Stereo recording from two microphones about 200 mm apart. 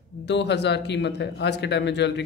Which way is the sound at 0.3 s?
60° left (ahead or behind).